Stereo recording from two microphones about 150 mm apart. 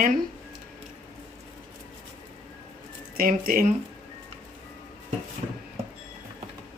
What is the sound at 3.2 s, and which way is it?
Speech, 75° right (ahead or behind).